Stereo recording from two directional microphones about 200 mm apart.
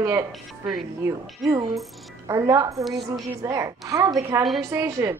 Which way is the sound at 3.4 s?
15° right (ahead or behind).